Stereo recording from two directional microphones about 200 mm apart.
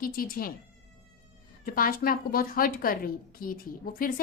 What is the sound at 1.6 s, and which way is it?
A woman's voice, 45° left (ahead or behind).